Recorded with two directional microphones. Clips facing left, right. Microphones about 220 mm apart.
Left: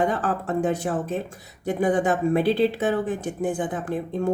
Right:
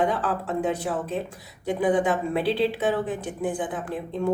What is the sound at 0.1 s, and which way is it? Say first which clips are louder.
Speech: left 2 dB; 45° left (ahead or behind).